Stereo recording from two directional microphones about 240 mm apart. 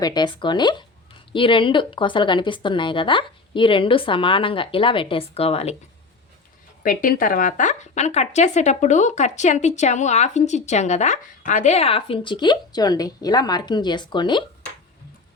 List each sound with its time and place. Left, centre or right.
0.0 s a woman's voice: centre
6.8 s a woman's voice: left; by 14.4 s centre